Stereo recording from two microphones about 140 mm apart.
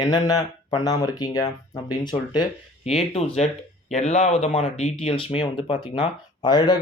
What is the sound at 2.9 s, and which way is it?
Speech, 45° left (ahead or behind).